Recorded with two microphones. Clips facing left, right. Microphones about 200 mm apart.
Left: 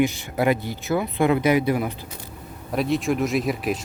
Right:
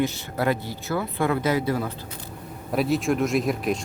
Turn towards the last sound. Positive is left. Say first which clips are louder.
# even
turn(degrees=0)  # may be behind; listen again after turning